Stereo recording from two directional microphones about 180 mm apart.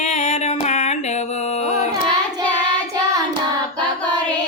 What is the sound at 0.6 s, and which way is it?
Music, 40° left (ahead or behind).